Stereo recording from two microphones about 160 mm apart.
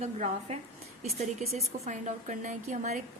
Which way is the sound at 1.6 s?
45° right (ahead or behind).